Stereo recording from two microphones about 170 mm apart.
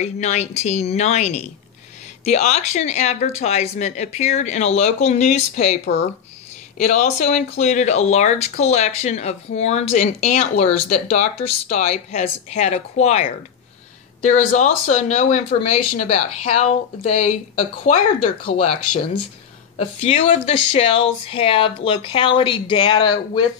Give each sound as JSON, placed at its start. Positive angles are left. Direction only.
{"t": 0.0, "sound": "speech", "side_deg": 40}
{"t": 6.8, "sound": "speech", "side_deg": 45}
{"t": 19.8, "sound": "speech", "side_deg": 35}